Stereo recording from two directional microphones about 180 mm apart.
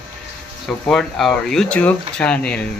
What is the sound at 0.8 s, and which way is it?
Speech, 5° left (ahead or behind).